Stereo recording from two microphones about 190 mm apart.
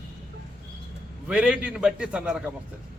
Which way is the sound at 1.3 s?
5° right (ahead or behind).